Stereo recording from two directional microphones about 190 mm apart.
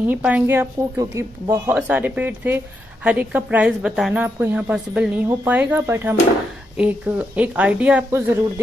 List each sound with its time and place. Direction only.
0.1 s speech: 10° right (ahead or behind)